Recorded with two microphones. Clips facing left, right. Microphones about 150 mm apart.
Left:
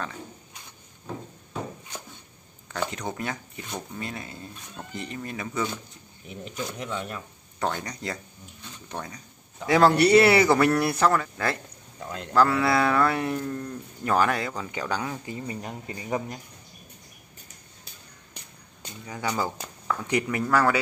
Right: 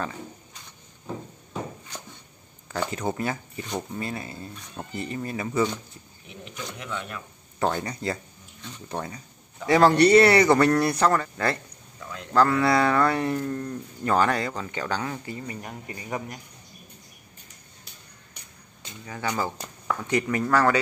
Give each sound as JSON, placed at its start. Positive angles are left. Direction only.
{"t": 2.8, "sound": "speech", "side_deg": -5}
{"t": 6.8, "sound": "speech", "side_deg": 30}
{"t": 7.5, "sound": "speech", "side_deg": 0}
{"t": 9.7, "sound": "speech", "side_deg": 0}
{"t": 15.3, "sound": "speech", "side_deg": 25}
{"t": 19.0, "sound": "speech", "side_deg": 10}